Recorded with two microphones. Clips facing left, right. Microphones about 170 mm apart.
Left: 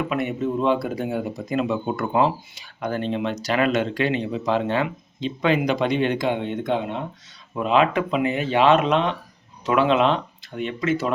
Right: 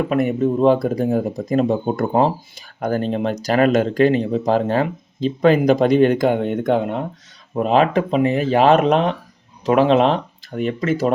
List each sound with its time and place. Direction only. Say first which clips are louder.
0.0 s speech: right 6 dB; 40° right (ahead or behind)